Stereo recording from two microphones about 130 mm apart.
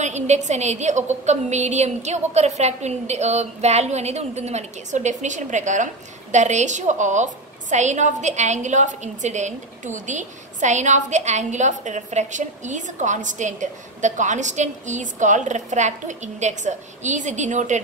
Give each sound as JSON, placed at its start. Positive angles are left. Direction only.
{"t": 0.0, "sound": "a woman's voice", "side_deg": -60}